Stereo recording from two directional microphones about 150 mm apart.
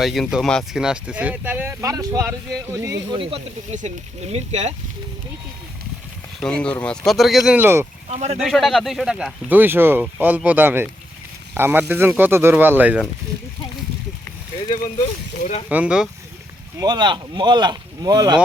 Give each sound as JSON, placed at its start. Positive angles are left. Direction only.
{"t": 0.0, "sound": "speech", "side_deg": 0}
{"t": 3.2, "sound": "speech", "side_deg": -40}
{"t": 6.4, "sound": "speech", "side_deg": 5}
{"t": 7.6, "sound": "speech", "side_deg": -15}
{"t": 8.1, "sound": "speech", "side_deg": -45}
{"t": 8.4, "sound": "speech", "side_deg": 0}
{"t": 15.7, "sound": "speech", "side_deg": -5}
{"t": 16.8, "sound": "speech", "side_deg": -30}